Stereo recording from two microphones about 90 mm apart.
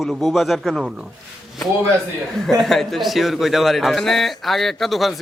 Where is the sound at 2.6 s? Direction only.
5° left (ahead or behind).